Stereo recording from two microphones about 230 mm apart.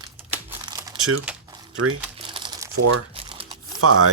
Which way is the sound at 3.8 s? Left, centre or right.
Right.